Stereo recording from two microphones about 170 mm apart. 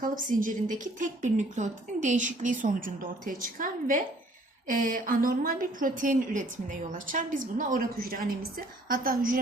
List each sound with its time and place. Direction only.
0.0 s a woman's voice: 50° right (ahead or behind)